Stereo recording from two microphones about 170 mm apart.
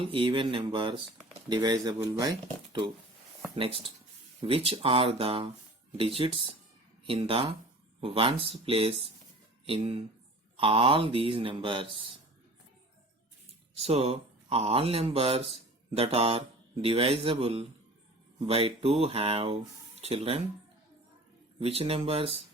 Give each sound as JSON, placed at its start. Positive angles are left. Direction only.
{"t": 0.0, "sound": "speech", "side_deg": -30}
{"t": 3.5, "sound": "speech", "side_deg": -35}
{"t": 13.7, "sound": "speech", "side_deg": -35}
{"t": 21.6, "sound": "speech", "side_deg": -35}